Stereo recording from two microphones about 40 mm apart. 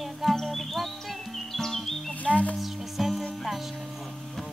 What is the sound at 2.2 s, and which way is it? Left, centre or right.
Music, left.